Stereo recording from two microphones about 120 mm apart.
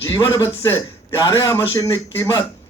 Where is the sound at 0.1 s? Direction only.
35° left (ahead or behind).